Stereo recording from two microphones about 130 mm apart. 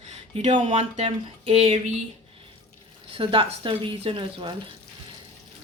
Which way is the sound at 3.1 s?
45° right (ahead or behind).